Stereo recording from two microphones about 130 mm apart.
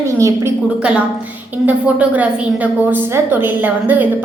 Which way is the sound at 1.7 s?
10° right (ahead or behind).